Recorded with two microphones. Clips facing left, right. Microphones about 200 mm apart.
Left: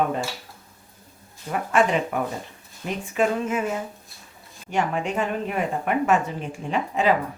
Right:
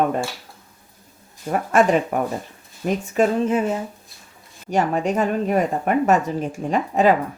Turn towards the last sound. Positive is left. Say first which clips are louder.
# right 4 dB
turn(degrees=-45)  # may be behind; listen again after turning